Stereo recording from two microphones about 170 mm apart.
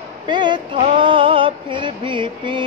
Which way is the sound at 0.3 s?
25° right (ahead or behind).